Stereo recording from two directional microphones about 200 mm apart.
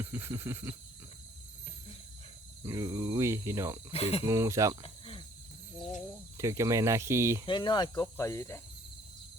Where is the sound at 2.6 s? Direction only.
15° right (ahead or behind).